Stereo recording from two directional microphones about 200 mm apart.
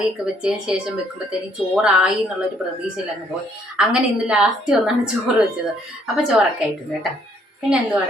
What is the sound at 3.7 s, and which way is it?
A woman's voice, 5° right (ahead or behind).